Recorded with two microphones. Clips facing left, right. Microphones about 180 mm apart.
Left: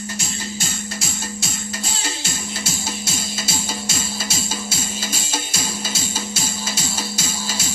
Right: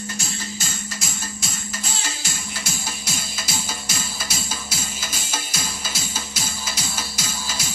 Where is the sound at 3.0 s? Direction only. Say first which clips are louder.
Left 5 dB; 25° left (ahead or behind).